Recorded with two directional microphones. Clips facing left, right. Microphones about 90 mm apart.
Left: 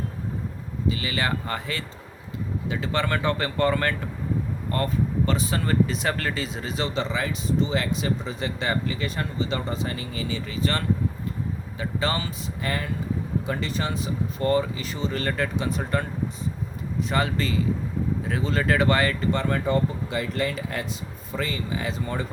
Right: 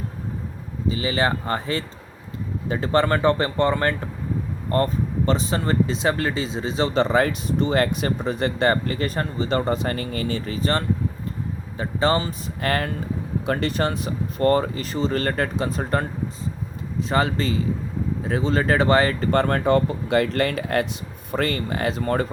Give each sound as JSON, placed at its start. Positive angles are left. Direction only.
{"t": 0.9, "sound": "speech", "side_deg": -30}
{"t": 6.9, "sound": "speech", "side_deg": -55}
{"t": 12.6, "sound": "speech", "side_deg": -65}
{"t": 19.3, "sound": "speech", "side_deg": -55}